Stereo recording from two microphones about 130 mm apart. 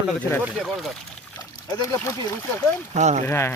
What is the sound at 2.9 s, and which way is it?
Speech, 60° right (ahead or behind).